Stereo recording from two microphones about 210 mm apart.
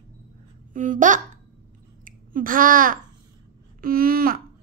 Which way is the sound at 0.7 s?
40° right (ahead or behind).